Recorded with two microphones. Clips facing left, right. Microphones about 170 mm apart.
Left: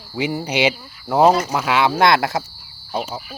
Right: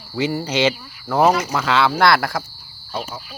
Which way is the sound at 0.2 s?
15° left (ahead or behind).